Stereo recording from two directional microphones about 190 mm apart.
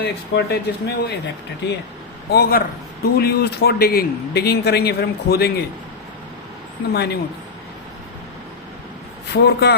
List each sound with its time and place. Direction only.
0.0 s a man's voice: 60° left (ahead or behind)
2.3 s a man's voice: 55° left (ahead or behind)
6.9 s a man's voice: 60° left (ahead or behind)
9.3 s a man's voice: 60° left (ahead or behind)